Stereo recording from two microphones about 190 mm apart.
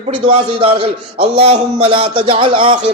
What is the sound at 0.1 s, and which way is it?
A man's voice, 30° right (ahead or behind).